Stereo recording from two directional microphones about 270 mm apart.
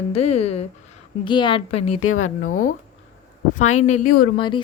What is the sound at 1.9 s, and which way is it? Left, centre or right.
Speech, left.